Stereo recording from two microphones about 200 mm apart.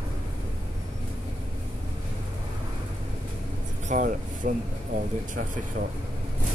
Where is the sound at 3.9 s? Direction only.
40° right (ahead or behind).